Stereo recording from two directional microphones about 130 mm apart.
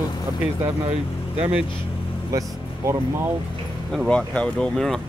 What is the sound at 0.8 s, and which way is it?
Speech, 55° right (ahead or behind).